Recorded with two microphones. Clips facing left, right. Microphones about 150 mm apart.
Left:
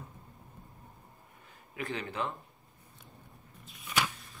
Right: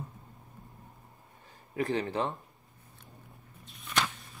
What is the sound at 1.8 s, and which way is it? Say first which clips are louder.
Speech: right 6 dB; 35° right (ahead or behind).